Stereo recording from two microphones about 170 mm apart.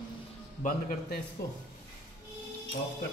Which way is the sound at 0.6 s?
50° left (ahead or behind).